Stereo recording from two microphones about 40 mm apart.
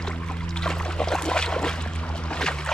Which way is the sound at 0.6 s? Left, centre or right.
Centre.